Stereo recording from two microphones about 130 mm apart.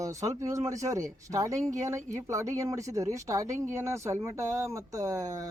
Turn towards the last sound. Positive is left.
turn(degrees=-25)  # may be behind; listen again after turning